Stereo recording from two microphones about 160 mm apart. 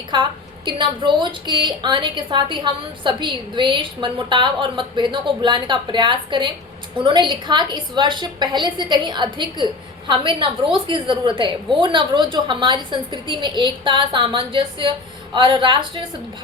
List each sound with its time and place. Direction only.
0.1 s a woman's voice: 30° right (ahead or behind)